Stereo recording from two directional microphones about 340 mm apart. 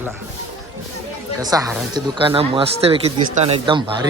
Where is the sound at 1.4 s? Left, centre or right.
Centre.